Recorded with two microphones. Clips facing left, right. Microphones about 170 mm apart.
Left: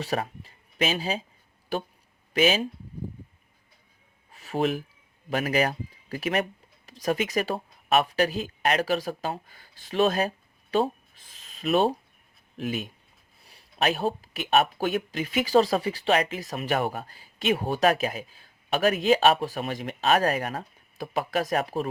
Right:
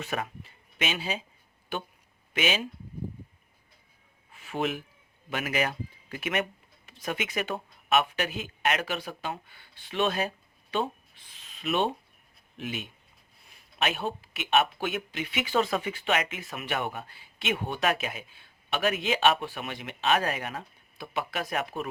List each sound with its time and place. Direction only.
0.0 s speech: 35° left (ahead or behind)
4.3 s a sound: 40° left (ahead or behind)
5.3 s speech: 35° left (ahead or behind)